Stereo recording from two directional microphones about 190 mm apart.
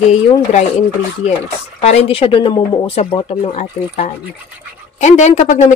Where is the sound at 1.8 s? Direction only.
35° left (ahead or behind).